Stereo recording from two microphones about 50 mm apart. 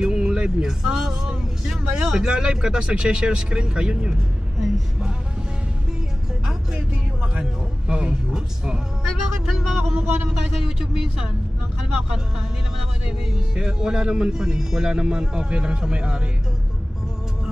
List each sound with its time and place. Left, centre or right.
0.0 s speech: centre
7.9 s speech: centre
13.6 s speech: centre